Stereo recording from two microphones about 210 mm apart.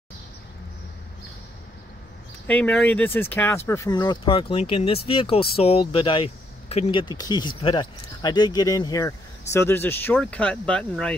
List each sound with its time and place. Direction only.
2.4 s speech: 5° left (ahead or behind)